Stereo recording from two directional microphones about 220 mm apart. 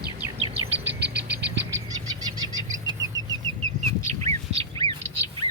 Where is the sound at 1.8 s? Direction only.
15° right (ahead or behind).